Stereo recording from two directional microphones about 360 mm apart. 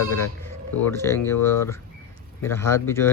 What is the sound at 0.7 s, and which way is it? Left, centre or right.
Speech, centre.